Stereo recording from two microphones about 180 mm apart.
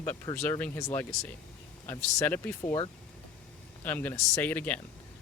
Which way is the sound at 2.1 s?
10° left (ahead or behind).